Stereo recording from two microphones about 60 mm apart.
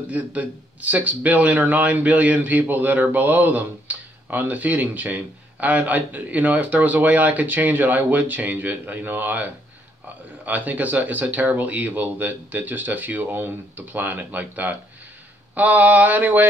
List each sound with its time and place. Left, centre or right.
0.1 s speech: right